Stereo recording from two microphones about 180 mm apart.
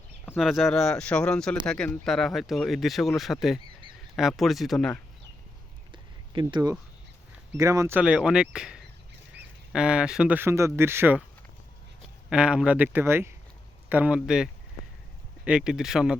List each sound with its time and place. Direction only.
0.3 s speech: centre (ahead or behind)
6.4 s speech: 20° right (ahead or behind)
12.3 s speech: 5° right (ahead or behind)